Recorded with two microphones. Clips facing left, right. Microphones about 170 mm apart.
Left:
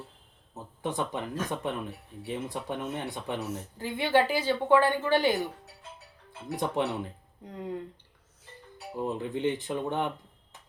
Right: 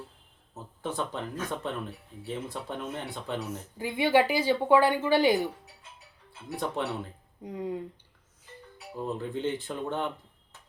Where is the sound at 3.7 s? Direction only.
10° right (ahead or behind).